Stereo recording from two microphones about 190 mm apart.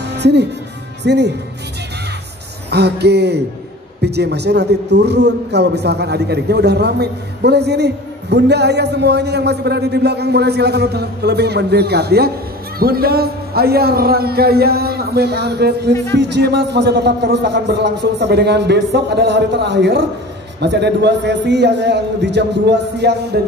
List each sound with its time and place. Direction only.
0.0 s music: 65° right (ahead or behind)
1.0 s a man's voice: 65° right (ahead or behind)
2.7 s a man's voice: 60° right (ahead or behind)